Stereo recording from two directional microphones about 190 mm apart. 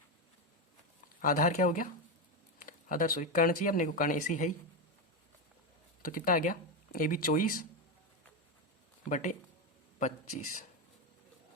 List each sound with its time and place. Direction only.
1.2 s speech: 45° left (ahead or behind)
6.0 s speech: 45° left (ahead or behind)
9.0 s a man's voice: 40° left (ahead or behind)